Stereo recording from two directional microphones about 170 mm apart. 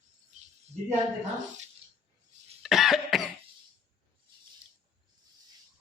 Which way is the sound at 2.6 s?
Centre (ahead or behind).